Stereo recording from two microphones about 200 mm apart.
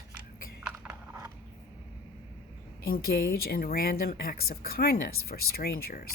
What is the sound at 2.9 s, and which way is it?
Speech, 50° left (ahead or behind).